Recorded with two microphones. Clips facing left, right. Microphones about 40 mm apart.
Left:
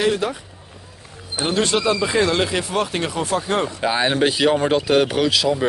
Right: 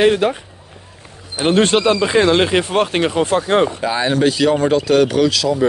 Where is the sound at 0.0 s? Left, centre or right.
Right.